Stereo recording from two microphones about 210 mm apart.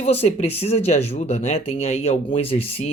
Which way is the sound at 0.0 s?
30° left (ahead or behind).